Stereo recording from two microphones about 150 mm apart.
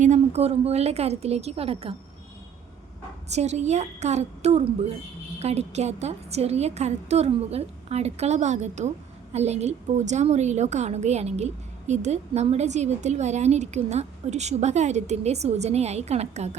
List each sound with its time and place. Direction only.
0.0 s a woman's voice: 50° right (ahead or behind)
3.2 s a woman's voice: 50° right (ahead or behind)